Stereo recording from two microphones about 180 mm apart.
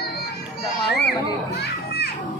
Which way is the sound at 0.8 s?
65° left (ahead or behind).